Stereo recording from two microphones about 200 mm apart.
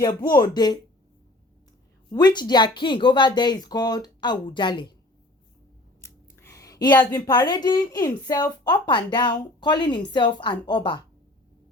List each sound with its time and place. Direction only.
0.3 s speech: 20° left (ahead or behind)
2.1 s speech: 20° left (ahead or behind)
6.0 s speech: 15° left (ahead or behind)